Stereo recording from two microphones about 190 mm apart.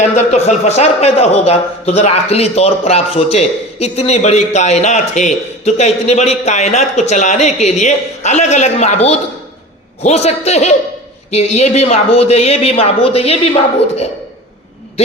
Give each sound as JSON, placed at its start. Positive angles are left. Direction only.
{"t": 0.1, "sound": "a man's voice", "side_deg": 35}